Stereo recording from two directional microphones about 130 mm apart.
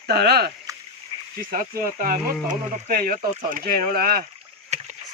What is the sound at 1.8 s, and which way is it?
Speech, 90° right.